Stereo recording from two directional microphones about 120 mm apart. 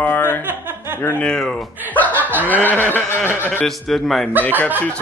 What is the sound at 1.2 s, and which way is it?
A man's voice, 5° left (ahead or behind).